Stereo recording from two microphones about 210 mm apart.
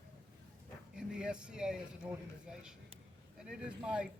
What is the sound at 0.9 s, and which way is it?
Speech, 5° right (ahead or behind).